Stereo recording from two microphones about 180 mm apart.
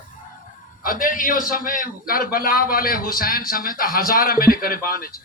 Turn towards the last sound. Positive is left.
turn(degrees=55)  # may be behind; listen again after turning